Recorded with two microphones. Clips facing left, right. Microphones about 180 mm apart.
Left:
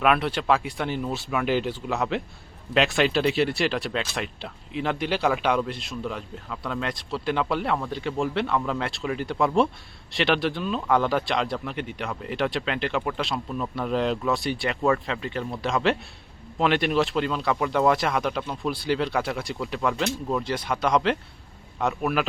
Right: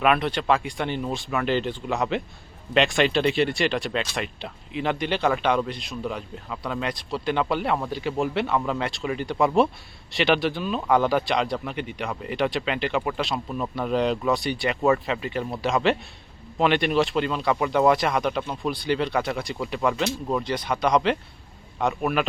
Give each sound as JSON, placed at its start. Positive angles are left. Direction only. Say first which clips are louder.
{"t": 0.0, "sound": "speech", "louder": "right 1 dB", "side_deg": 0}